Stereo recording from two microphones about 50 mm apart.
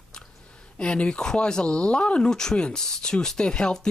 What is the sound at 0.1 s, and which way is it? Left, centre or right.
Speech, centre.